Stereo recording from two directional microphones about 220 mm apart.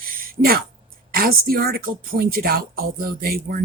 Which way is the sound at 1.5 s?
45° right (ahead or behind).